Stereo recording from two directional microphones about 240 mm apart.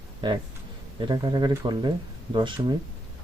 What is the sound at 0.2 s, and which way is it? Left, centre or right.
Speech, centre.